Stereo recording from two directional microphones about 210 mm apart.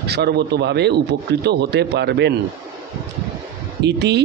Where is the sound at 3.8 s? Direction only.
55° right (ahead or behind).